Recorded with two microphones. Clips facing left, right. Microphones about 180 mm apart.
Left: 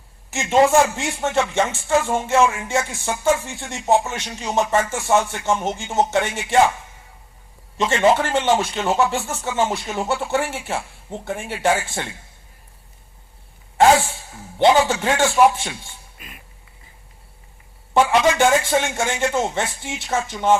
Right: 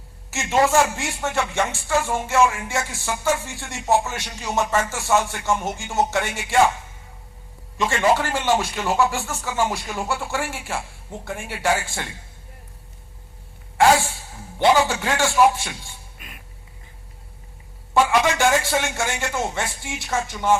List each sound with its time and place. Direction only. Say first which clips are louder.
0.3 s music: left 4 dB; 20° left (ahead or behind)
7.8 s music: left 3 dB; 20° left (ahead or behind)
14.6 s music: left 2 dB; 25° left (ahead or behind)
16.1 s duck: left 1 dB; centre (ahead or behind)
17.9 s music: left 3 dB; 20° left (ahead or behind)